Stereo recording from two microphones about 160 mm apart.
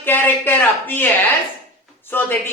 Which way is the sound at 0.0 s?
10° left (ahead or behind).